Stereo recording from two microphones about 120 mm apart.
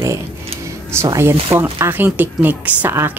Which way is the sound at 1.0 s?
20° right (ahead or behind).